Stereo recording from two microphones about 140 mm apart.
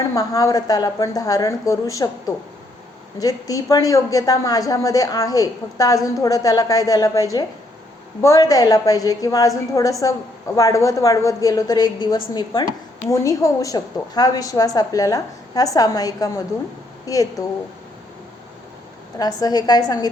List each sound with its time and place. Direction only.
0.0 s a woman's voice: 25° left (ahead or behind)
19.2 s a woman's voice: 30° left (ahead or behind)